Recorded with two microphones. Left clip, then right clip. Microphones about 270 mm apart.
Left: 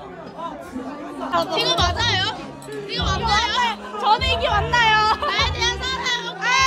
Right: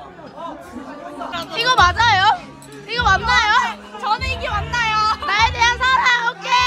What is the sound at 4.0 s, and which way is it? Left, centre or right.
Music, left.